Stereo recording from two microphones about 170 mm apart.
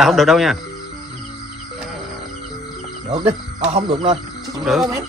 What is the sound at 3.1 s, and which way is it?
Speech, 35° right (ahead or behind).